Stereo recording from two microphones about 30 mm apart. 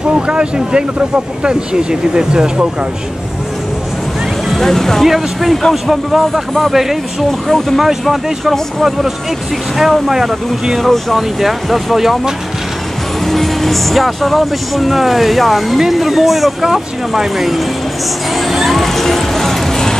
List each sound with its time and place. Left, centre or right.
0.1 s speech: right
0.9 s speech: right
4.5 s speech: centre
5.0 s speech: centre
8.1 s speech: centre
10.8 s speech: centre
11.1 s speech: centre
13.2 s speech: centre
18.3 s music: centre